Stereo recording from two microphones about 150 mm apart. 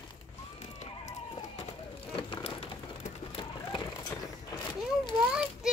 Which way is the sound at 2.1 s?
35° left (ahead or behind).